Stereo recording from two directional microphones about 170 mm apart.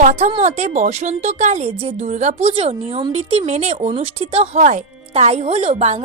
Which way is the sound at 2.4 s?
35° right (ahead or behind).